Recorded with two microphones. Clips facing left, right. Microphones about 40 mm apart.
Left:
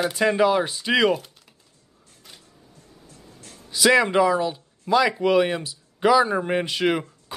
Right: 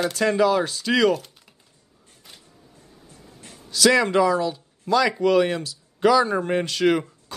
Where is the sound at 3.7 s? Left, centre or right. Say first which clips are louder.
Even; centre.